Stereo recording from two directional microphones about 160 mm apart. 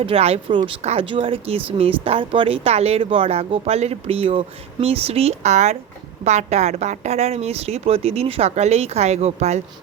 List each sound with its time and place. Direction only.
0.0 s speech: 40° right (ahead or behind)